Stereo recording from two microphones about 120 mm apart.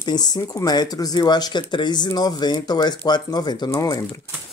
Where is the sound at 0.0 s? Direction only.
35° left (ahead or behind).